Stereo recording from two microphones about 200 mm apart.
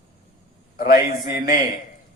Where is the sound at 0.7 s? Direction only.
45° left (ahead or behind).